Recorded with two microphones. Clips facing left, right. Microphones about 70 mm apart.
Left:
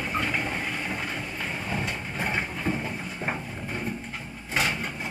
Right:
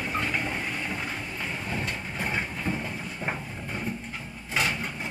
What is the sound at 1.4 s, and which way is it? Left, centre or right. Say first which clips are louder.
Vehicle: left 1 dB; centre.